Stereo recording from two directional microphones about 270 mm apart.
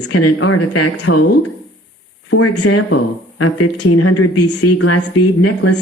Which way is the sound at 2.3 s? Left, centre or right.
Left.